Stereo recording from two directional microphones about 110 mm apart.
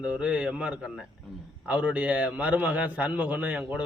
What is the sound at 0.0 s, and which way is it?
A man's voice, 10° right (ahead or behind).